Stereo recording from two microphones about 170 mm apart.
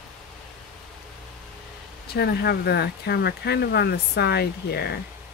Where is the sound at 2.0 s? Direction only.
70° left (ahead or behind).